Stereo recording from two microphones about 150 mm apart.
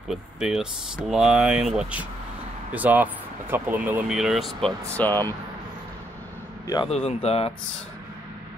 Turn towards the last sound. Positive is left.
turn(degrees=40)  # may be behind; listen again after turning